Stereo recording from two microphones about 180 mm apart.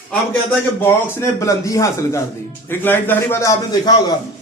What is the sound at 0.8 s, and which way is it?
A man's voice, 10° left (ahead or behind).